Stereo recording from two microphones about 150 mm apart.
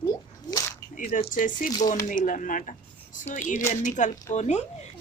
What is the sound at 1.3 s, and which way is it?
A woman's voice, 60° left (ahead or behind).